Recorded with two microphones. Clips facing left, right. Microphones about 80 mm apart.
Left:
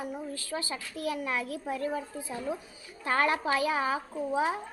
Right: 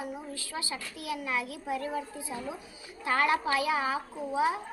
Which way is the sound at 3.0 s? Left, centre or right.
Left.